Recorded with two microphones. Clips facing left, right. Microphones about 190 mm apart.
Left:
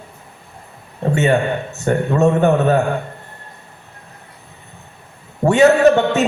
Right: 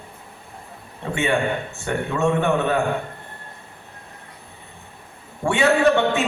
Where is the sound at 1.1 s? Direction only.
40° left (ahead or behind).